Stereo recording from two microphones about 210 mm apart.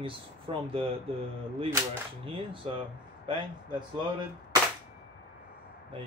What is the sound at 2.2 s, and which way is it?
Speech, 25° right (ahead or behind).